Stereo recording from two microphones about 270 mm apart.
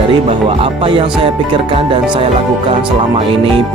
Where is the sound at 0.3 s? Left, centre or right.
Centre.